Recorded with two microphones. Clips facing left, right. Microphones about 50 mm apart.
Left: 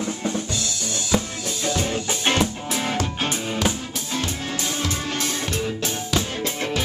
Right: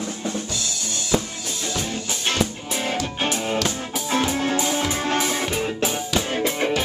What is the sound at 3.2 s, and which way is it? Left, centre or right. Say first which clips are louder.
Music: right 3 dB; centre.